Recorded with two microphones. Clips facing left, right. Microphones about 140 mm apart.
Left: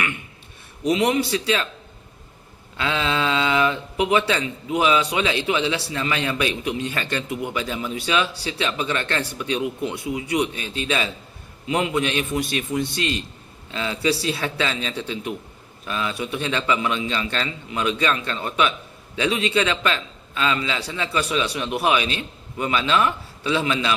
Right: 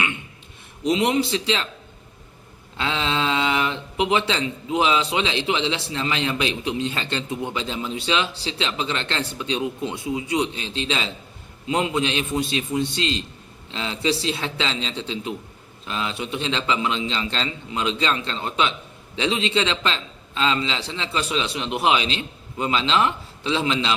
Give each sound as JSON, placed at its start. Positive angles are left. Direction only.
{"t": 0.9, "sound": "speech", "side_deg": -25}
{"t": 2.7, "sound": "speech", "side_deg": -20}